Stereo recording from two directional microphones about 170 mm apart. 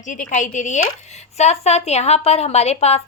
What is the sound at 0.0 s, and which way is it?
A woman's voice, 50° left (ahead or behind).